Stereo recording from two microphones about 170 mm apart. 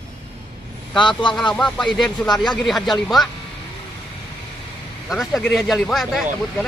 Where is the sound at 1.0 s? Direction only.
30° left (ahead or behind).